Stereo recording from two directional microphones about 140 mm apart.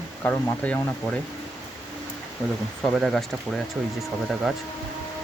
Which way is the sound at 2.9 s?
Centre (ahead or behind).